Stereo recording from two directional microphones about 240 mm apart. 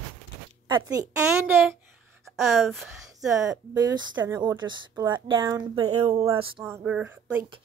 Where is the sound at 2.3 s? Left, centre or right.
Centre.